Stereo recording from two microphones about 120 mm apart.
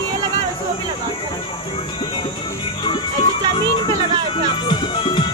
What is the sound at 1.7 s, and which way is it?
Music, 45° left (ahead or behind).